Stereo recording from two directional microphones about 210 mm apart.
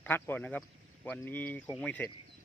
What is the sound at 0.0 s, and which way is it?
Speech, 10° left (ahead or behind).